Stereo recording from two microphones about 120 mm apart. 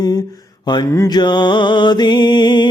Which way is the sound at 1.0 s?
35° left (ahead or behind).